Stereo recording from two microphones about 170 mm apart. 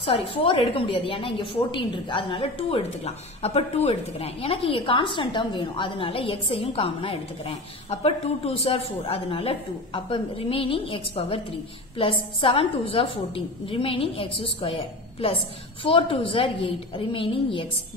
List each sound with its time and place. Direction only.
0.0 s a woman's voice: 35° left (ahead or behind)